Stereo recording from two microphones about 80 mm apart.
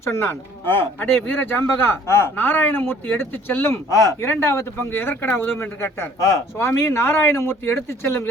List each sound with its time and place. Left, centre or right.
0.0 s speech: left